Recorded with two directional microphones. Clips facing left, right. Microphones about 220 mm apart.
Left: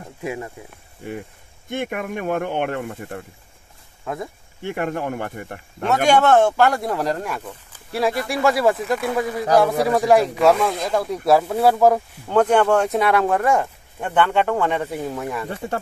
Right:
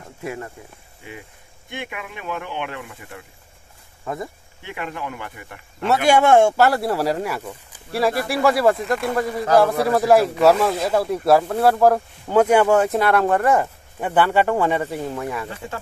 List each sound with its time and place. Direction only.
0.2 s speech: 15° left (ahead or behind)
1.7 s speech: 45° left (ahead or behind)
4.0 s speech: centre (ahead or behind)
4.6 s speech: 50° left (ahead or behind)
6.0 s speech: 10° right (ahead or behind)